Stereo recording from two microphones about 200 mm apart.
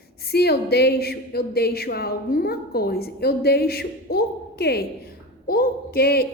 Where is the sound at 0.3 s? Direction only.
55° left (ahead or behind).